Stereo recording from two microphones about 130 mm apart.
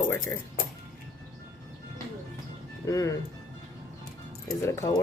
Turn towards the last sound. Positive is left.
turn(degrees=25)  # may be behind; listen again after turning